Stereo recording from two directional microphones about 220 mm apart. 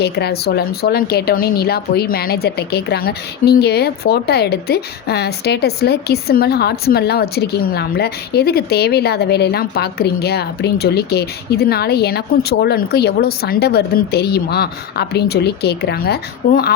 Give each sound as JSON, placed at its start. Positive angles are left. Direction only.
{"t": 0.0, "sound": "speech", "side_deg": 45}